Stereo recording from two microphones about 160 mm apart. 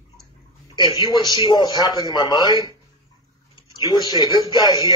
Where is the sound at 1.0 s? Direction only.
25° left (ahead or behind).